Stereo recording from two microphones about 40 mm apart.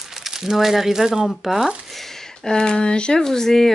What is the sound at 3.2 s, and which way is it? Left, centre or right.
Speech, centre.